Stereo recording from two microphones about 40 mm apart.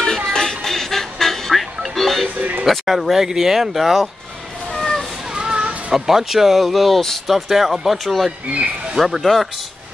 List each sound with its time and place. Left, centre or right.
0.0 s music: centre
2.6 s speech: centre
4.7 s a sound: centre
5.3 s children playing: centre
5.9 s speech: centre